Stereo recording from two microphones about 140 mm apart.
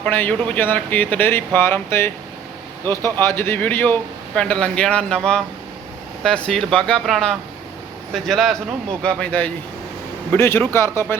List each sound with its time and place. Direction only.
0.0 s speech: 10° left (ahead or behind)